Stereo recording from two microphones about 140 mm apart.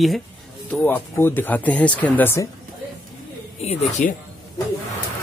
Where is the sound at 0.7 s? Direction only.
10° left (ahead or behind).